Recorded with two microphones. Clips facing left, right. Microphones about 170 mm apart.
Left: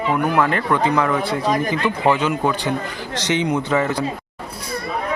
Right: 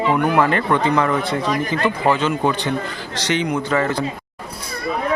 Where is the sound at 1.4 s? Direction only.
45° left (ahead or behind).